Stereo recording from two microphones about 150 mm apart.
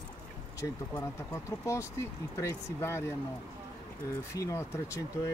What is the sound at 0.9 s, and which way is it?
Speech, 20° left (ahead or behind).